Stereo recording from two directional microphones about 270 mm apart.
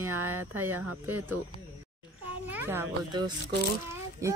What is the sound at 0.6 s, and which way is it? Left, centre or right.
Speech, right.